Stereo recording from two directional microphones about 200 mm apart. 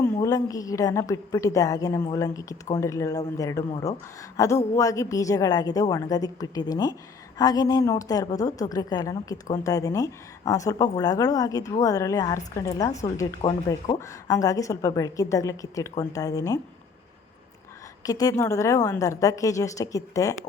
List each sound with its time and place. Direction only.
0.0 s a woman's voice: 15° left (ahead or behind)
18.0 s a woman's voice: 20° left (ahead or behind)